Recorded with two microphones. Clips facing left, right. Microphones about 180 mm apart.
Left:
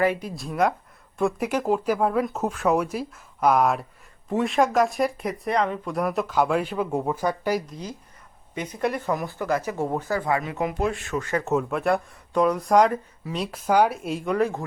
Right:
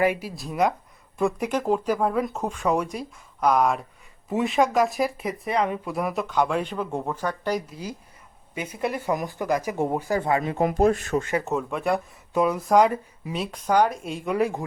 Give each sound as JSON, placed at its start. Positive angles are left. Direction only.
{"t": 0.0, "sound": "speech", "side_deg": -10}
{"t": 7.7, "sound": "speech", "side_deg": -10}
{"t": 10.2, "sound": "speech", "side_deg": -25}
{"t": 10.6, "sound": "speech", "side_deg": -40}
{"t": 11.3, "sound": "speech", "side_deg": 0}
{"t": 14.3, "sound": "speech", "side_deg": -10}